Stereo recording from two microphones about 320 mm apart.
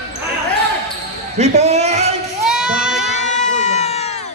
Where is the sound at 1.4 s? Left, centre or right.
Centre.